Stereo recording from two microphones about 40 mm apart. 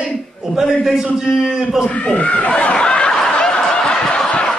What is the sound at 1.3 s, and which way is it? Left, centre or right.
Speech, centre.